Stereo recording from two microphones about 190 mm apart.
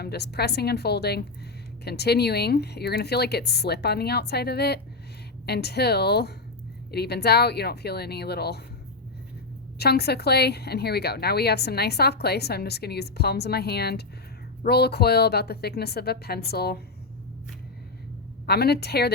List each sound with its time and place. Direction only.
0.0 s a woman's voice: 60° left (ahead or behind)
9.7 s a woman's voice: 55° left (ahead or behind)
18.4 s a woman's voice: 60° left (ahead or behind)